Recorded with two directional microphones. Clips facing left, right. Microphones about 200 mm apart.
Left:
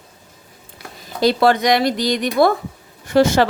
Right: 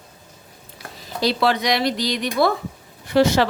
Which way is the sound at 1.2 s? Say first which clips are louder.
Left 5 dB; 50° left (ahead or behind).